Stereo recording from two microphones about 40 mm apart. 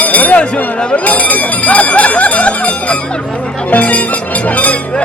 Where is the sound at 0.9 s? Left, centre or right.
Left.